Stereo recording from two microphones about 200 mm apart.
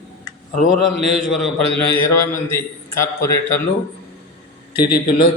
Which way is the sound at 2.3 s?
15° left (ahead or behind).